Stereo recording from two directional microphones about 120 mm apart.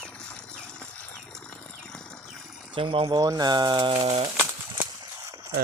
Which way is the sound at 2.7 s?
45° right (ahead or behind).